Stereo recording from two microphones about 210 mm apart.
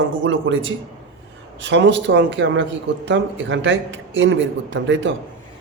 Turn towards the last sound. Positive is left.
turn(degrees=-60)  # may be behind; listen again after turning